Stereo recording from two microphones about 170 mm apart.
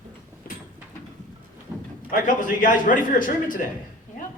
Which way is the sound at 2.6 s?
50° left (ahead or behind).